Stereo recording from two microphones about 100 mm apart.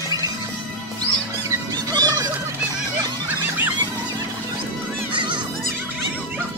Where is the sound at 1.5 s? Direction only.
40° right (ahead or behind).